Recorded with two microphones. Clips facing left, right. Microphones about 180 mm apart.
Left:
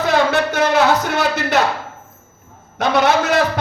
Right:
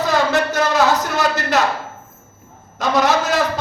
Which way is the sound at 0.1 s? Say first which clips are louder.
Left 2 dB; 65° left (ahead or behind).